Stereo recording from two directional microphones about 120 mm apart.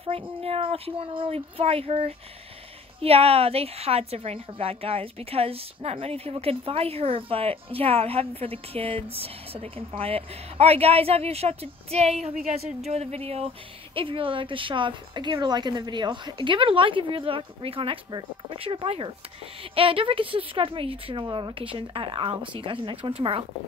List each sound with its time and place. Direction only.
0.0 s a woman's voice: 55° right (ahead or behind)
13.9 s a woman's voice: 45° right (ahead or behind)